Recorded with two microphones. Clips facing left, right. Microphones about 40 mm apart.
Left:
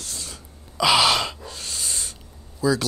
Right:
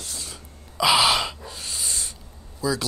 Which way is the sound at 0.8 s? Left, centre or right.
Right.